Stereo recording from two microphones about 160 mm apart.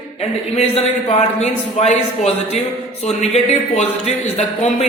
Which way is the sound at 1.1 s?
45° left (ahead or behind).